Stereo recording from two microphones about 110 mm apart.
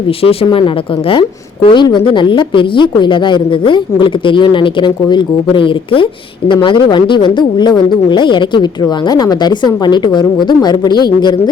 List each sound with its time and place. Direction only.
0.2 s speech: 55° left (ahead or behind)
1.6 s speech: 45° left (ahead or behind)